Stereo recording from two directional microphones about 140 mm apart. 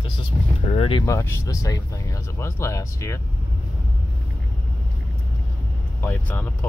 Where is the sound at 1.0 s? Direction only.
20° left (ahead or behind).